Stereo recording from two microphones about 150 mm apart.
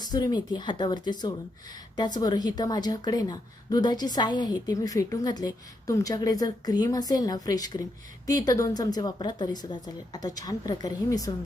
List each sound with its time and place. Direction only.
0.0 s a woman's voice: 25° left (ahead or behind)